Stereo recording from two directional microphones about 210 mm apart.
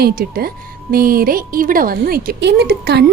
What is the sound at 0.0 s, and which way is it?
A woman's voice, 45° right (ahead or behind).